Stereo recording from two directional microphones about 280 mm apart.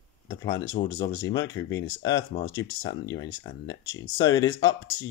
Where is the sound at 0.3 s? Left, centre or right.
Centre.